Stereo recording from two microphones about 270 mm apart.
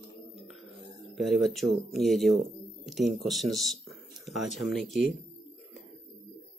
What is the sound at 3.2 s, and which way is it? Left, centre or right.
Speech, centre.